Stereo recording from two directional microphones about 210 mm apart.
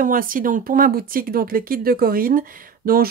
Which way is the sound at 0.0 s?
40° right (ahead or behind).